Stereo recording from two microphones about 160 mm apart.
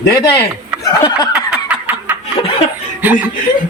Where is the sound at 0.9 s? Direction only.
25° left (ahead or behind).